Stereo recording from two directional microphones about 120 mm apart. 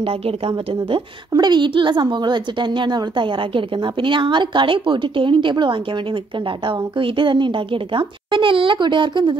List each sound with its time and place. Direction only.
1.3 s a woman's voice: 35° right (ahead or behind)